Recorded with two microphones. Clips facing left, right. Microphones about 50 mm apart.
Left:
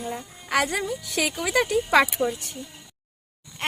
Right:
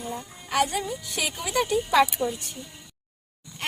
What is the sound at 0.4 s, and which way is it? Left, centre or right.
Speech, left.